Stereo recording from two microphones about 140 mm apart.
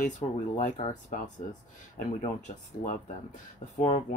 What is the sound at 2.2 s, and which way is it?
Speech, 65° left (ahead or behind).